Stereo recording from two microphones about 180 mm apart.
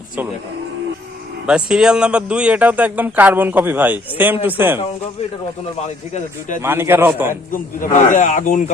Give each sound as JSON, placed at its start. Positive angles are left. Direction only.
{"t": 1.5, "sound": "speech", "side_deg": -5}
{"t": 6.6, "sound": "speech", "side_deg": -15}
{"t": 7.5, "sound": "speech", "side_deg": 45}